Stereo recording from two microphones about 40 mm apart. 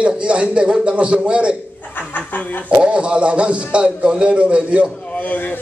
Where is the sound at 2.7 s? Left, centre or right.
Right.